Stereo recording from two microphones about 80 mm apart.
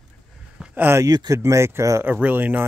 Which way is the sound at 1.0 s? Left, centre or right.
Right.